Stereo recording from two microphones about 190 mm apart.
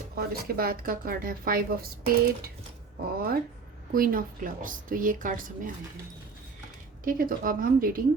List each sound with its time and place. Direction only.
0.2 s a woman's voice: 50° right (ahead or behind)
3.9 s a woman's voice: 45° right (ahead or behind)
7.0 s a woman's voice: 45° right (ahead or behind)